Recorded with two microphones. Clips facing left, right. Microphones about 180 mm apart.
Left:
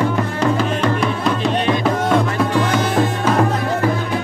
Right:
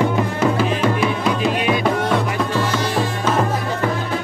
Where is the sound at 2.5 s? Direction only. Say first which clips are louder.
Left 3 dB; 15° left (ahead or behind).